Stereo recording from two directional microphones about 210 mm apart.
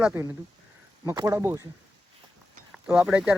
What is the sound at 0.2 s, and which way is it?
Speech, 10° right (ahead or behind).